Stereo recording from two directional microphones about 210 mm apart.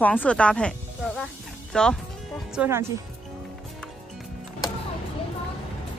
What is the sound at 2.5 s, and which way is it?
Speech, 10° right (ahead or behind).